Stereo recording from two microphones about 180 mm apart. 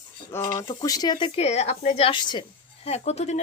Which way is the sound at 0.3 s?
15° left (ahead or behind).